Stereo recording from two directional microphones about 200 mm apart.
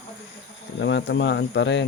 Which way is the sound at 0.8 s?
65° left (ahead or behind).